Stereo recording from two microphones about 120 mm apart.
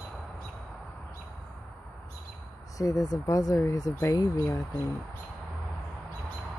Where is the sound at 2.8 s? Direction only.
30° left (ahead or behind).